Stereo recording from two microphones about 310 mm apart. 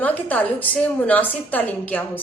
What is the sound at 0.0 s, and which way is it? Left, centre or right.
A woman's voice, centre.